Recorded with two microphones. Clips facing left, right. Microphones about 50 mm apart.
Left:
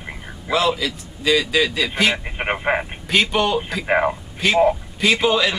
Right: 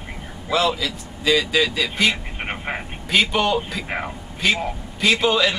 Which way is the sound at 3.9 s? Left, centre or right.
Left.